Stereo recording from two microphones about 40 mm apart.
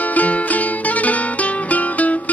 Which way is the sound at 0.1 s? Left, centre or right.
Left.